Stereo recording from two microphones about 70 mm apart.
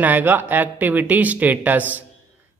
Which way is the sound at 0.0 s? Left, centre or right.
Right.